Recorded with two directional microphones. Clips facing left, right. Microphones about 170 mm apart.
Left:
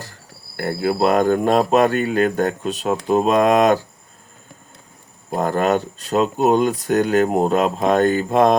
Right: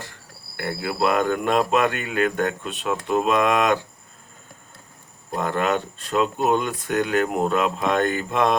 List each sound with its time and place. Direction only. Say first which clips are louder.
0.0 s speech: left 2 dB; 40° left (ahead or behind)
5.3 s speech: left 5 dB; 40° left (ahead or behind)